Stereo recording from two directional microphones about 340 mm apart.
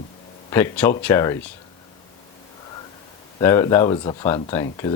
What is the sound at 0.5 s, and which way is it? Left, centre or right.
Speech, centre.